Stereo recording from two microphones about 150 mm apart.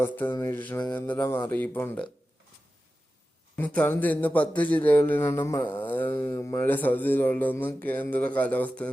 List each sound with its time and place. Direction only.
0.0 s a man's voice: 15° left (ahead or behind)
3.5 s a man's voice: 10° left (ahead or behind)